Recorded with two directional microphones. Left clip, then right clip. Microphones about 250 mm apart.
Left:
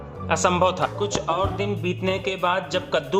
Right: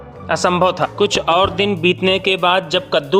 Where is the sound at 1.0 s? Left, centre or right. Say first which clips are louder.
Right 13 dB; right.